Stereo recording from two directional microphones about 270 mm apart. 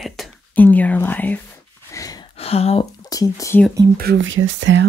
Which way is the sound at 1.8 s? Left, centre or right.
Centre.